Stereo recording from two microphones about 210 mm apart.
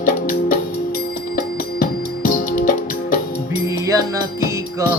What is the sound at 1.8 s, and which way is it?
Music, 40° left (ahead or behind).